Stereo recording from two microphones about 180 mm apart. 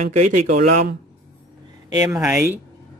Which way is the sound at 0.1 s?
45° right (ahead or behind).